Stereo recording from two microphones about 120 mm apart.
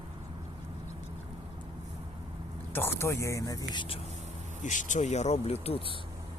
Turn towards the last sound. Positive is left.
turn(degrees=55)  # may be behind; listen again after turning